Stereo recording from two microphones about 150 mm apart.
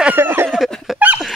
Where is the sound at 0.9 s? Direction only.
10° right (ahead or behind).